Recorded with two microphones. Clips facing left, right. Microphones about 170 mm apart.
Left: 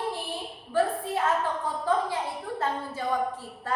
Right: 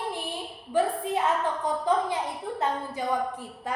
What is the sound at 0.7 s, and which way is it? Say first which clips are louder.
A woman's voice: right 1 dB; 15° right (ahead or behind).